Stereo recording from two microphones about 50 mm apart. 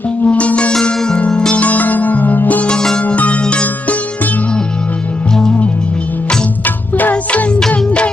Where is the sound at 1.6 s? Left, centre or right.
Left.